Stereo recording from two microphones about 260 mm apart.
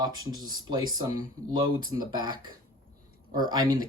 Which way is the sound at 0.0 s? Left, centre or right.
Centre.